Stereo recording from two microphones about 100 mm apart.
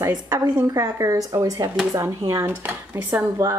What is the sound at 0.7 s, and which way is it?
Speech, 35° right (ahead or behind).